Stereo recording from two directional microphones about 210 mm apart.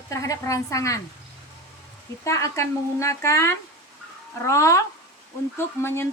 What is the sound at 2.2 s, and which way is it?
Speech, 15° left (ahead or behind).